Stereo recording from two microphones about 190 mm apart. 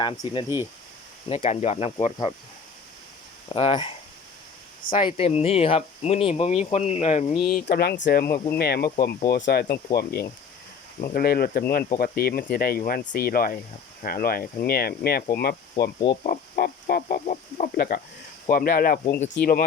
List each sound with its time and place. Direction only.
0.0 s speech: 25° left (ahead or behind)
3.5 s speech: 25° left (ahead or behind)
4.9 s speech: 25° left (ahead or behind)
7.5 s speech: 55° left (ahead or behind)